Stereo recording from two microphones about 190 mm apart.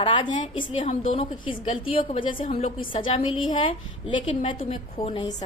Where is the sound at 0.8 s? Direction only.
40° left (ahead or behind).